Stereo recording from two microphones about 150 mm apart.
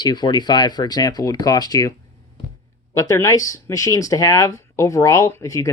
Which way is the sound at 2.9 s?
20° left (ahead or behind).